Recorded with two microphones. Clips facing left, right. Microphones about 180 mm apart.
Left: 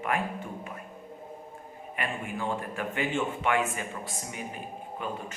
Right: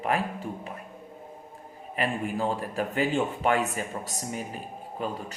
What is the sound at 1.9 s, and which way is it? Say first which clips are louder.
Speech: right 6 dB; 35° right (ahead or behind).